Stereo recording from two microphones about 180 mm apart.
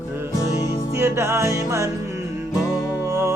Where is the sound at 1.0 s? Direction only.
15° right (ahead or behind).